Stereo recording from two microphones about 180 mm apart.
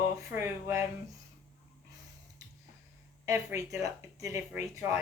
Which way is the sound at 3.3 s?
15° right (ahead or behind).